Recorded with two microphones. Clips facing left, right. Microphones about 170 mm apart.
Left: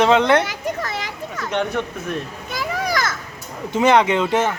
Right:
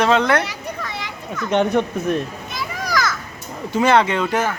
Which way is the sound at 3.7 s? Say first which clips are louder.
Left 1 dB; 20° left (ahead or behind).